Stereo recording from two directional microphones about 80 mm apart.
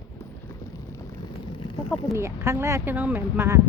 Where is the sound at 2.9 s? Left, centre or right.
Right.